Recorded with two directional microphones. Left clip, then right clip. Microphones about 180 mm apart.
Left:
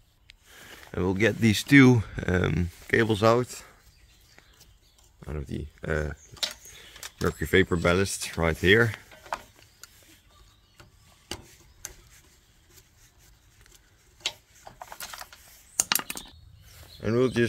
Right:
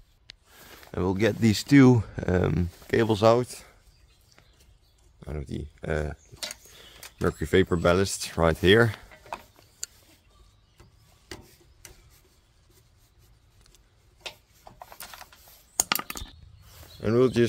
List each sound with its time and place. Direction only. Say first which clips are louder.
0.5 s speech: left 3 dB; 5° left (ahead or behind)
5.2 s speech: even; 5° left (ahead or behind); by 9.0 s 15° right (ahead or behind)
14.2 s a sound: left 7 dB; 10° left (ahead or behind)
16.8 s speech: right 3 dB; 20° right (ahead or behind)